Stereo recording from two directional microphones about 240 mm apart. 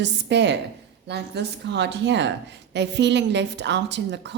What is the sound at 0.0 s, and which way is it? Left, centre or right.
Speech, right.